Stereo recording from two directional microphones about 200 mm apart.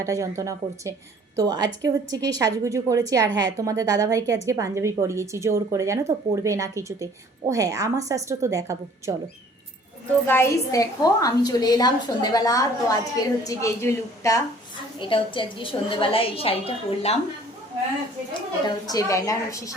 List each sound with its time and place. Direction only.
0.0 s a woman's voice: 15° right (ahead or behind)
10.2 s a woman's voice: 10° left (ahead or behind); by 17.2 s 30° left (ahead or behind)
18.9 s a woman's voice: 15° left (ahead or behind)